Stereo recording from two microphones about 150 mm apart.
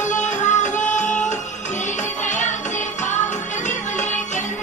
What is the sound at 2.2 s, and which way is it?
Music, 55° left (ahead or behind).